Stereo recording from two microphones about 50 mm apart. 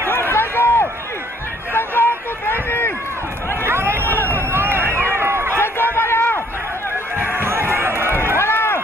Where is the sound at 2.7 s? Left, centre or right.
Left.